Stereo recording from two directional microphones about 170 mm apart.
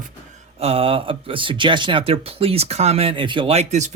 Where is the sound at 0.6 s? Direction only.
35° right (ahead or behind).